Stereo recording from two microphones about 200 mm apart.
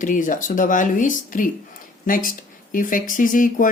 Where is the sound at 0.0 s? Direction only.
40° left (ahead or behind).